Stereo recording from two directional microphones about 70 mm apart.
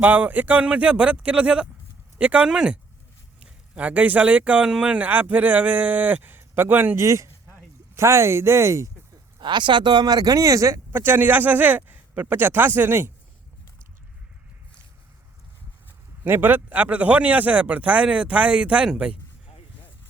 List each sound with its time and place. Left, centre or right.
0.0 s a man's voice: right
7.0 s speech: right
9.4 s speech: right
10.9 s a man's voice: right
16.2 s a man's voice: right; by 19.1 s centre